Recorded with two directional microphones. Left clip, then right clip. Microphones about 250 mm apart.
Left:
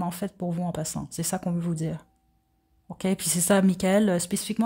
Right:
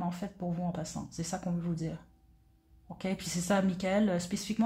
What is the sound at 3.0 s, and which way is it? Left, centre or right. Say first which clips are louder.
Speech: left 8 dB; left.